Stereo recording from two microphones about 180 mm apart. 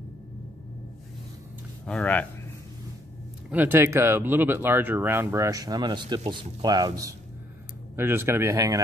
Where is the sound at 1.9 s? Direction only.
5° left (ahead or behind).